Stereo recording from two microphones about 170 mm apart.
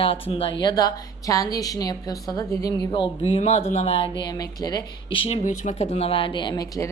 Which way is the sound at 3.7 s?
35° left (ahead or behind).